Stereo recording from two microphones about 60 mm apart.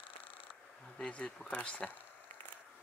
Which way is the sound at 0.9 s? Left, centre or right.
Centre.